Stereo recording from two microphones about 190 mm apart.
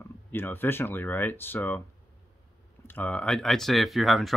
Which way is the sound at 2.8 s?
10° left (ahead or behind).